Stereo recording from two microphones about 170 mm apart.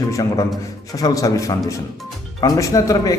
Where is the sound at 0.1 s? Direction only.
20° left (ahead or behind).